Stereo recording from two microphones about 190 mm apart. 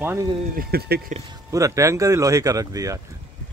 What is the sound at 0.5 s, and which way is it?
Speech, 50° right (ahead or behind).